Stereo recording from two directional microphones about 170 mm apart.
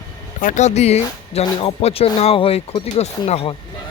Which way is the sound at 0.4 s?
45° left (ahead or behind).